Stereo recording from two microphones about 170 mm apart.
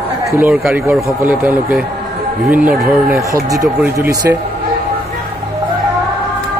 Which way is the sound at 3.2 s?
20° right (ahead or behind).